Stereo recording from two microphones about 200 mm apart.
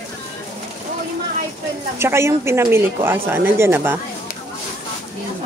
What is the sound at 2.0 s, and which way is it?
Speech, 15° right (ahead or behind).